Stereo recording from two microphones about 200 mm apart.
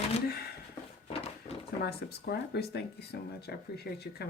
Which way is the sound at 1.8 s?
55° left (ahead or behind).